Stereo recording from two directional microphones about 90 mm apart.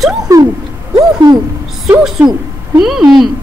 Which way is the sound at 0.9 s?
45° right (ahead or behind).